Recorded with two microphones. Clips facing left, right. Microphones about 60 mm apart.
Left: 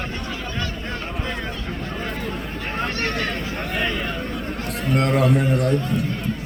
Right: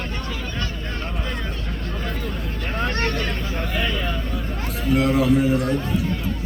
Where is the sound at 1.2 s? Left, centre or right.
Centre.